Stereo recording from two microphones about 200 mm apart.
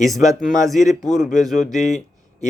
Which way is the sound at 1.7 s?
35° left (ahead or behind).